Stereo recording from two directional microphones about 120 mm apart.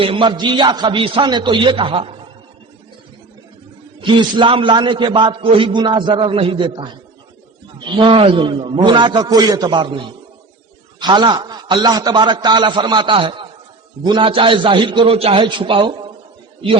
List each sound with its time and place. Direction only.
0.0 s a man's voice: 45° right (ahead or behind)
4.0 s a man's voice: 45° right (ahead or behind)